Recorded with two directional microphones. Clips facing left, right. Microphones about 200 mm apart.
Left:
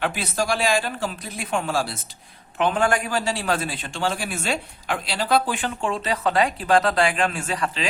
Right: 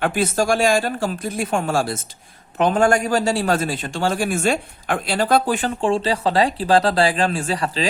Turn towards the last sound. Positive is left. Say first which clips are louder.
# right 4 dB
turn(degrees=-35)  # may be behind; listen again after turning